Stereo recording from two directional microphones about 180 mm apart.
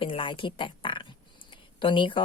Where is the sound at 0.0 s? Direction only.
30° left (ahead or behind).